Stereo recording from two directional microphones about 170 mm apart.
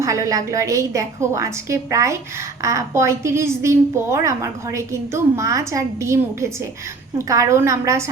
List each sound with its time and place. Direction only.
0.0 s a woman's voice: 20° right (ahead or behind)